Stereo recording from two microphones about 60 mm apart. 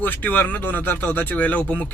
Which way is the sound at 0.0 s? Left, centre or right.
Left.